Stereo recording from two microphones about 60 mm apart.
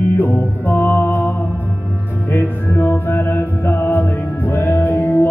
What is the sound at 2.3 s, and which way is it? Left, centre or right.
Music, left.